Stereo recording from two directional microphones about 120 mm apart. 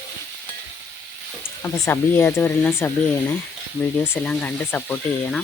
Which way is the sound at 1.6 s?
20° left (ahead or behind).